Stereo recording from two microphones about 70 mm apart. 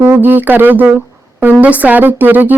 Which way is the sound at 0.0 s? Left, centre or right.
Right.